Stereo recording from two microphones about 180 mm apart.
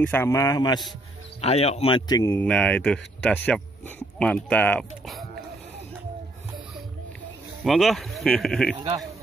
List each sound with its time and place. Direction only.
0.0 s speech: 10° left (ahead or behind)
1.4 s speech: 35° left (ahead or behind); by 5.2 s 5° left (ahead or behind)
7.6 s speech: centre (ahead or behind)